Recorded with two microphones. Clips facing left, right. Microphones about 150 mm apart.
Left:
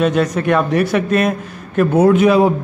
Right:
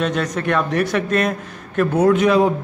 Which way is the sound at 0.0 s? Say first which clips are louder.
Left 5 dB; 10° left (ahead or behind).